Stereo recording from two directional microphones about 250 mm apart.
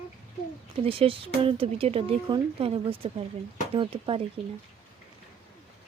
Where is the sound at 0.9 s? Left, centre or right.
Right.